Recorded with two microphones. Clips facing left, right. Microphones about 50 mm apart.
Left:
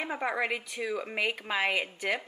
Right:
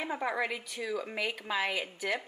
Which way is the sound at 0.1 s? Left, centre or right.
Centre.